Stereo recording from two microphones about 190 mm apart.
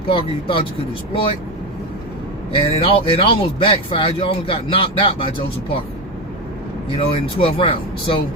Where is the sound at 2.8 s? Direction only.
30° left (ahead or behind).